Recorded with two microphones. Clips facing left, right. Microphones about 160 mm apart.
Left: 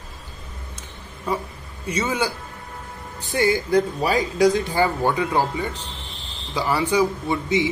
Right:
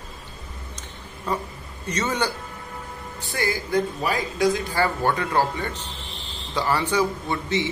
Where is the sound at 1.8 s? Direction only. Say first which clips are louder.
Left 2 dB; 10° left (ahead or behind).